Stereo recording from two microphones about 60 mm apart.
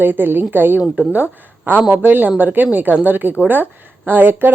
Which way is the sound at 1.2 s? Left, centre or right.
Left.